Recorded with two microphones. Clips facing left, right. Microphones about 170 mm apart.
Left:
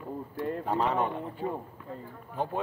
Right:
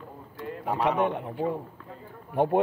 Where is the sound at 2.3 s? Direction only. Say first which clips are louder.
Right 9 dB; 65° right (ahead or behind).